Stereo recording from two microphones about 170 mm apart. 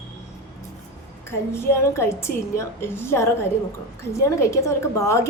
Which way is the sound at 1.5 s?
15° left (ahead or behind).